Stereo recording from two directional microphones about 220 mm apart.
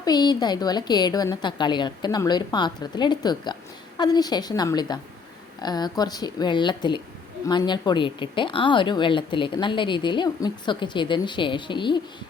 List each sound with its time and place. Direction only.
0.0 s a woman's voice: 20° left (ahead or behind)